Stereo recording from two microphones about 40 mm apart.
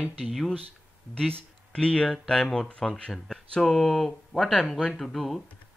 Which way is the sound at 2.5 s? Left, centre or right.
Left.